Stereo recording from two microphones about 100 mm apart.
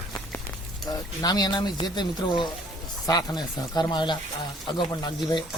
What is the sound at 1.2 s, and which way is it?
Speech, 45° left (ahead or behind).